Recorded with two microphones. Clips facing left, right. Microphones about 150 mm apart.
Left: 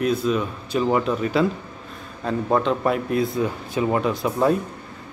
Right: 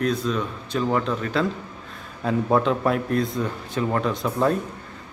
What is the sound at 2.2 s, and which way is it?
Speech, centre (ahead or behind).